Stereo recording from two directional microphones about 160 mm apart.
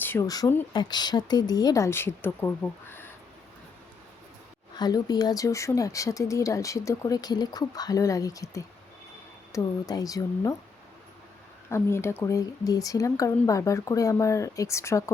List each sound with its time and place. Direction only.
0.0 s speech: 15° left (ahead or behind)
4.8 s speech: 25° left (ahead or behind)
11.7 s speech: 15° left (ahead or behind)